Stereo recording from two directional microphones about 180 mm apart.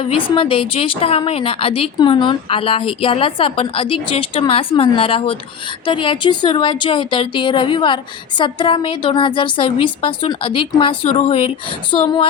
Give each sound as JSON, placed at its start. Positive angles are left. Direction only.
{"t": 0.0, "sound": "a woman's voice", "side_deg": 30}